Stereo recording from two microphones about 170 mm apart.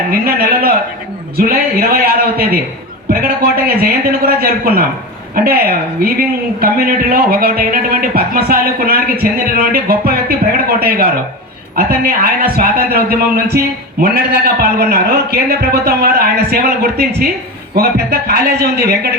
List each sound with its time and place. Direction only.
0.1 s a man's voice: 60° right (ahead or behind)